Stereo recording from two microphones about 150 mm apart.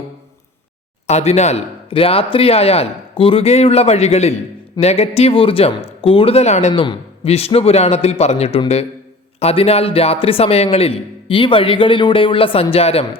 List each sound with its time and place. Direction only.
1.0 s a man's voice: 45° left (ahead or behind)